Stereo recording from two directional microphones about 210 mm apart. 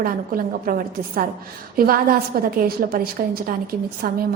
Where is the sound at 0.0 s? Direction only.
45° right (ahead or behind).